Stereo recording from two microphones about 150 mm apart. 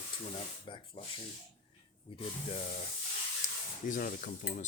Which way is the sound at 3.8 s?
65° left (ahead or behind).